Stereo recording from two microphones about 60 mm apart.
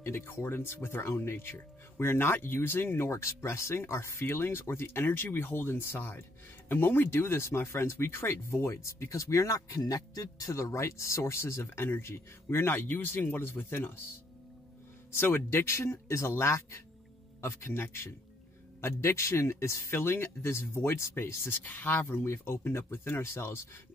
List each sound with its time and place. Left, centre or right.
0.0 s speech: left
15.1 s speech: left